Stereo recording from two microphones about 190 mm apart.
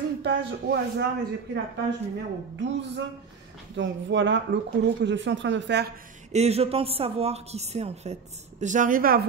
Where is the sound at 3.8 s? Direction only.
70° right (ahead or behind).